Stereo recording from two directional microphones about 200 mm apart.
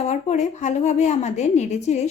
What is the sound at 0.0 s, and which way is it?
A woman's voice, 35° left (ahead or behind).